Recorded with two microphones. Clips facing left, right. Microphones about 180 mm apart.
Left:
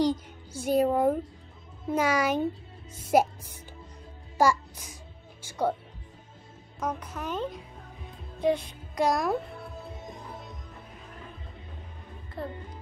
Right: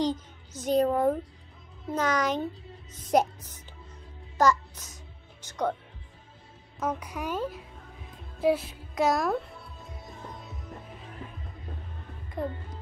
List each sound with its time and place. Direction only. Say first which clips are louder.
0.0 s a child's voice: left 2 dB; 10° left (ahead or behind)
4.4 s a child's voice: even; 10° left (ahead or behind)
5.4 s music: left 1 dB; 10° left (ahead or behind)
6.8 s a woman's voice: right 1 dB; 10° right (ahead or behind)
12.4 s a child's voice: right 4 dB; 15° right (ahead or behind)